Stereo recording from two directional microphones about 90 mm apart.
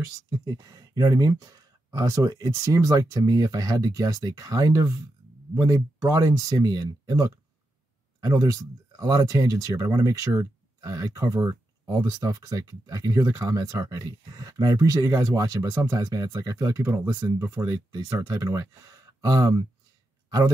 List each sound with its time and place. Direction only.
0.0 s speech: 40° right (ahead or behind)
16.0 s speech: 45° right (ahead or behind)